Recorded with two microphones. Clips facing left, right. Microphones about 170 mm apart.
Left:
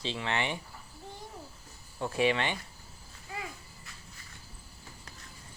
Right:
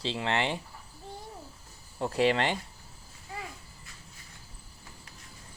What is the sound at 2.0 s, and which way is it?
Speech, 35° right (ahead or behind).